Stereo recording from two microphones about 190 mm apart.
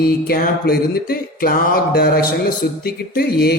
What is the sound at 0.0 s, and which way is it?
Music, 55° left (ahead or behind).